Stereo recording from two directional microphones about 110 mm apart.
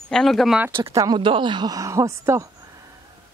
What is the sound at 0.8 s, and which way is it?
Speech, 30° right (ahead or behind).